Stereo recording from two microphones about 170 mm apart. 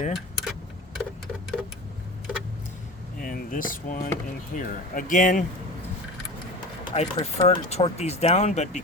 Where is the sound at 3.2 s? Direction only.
55° left (ahead or behind).